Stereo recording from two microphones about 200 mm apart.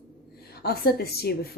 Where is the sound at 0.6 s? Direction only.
50° left (ahead or behind).